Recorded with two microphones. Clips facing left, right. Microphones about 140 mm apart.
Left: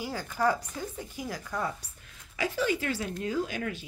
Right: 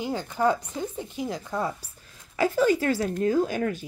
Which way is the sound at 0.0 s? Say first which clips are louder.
Right 4 dB; 20° right (ahead or behind).